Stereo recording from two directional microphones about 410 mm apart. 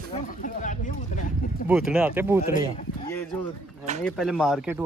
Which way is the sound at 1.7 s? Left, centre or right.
Centre.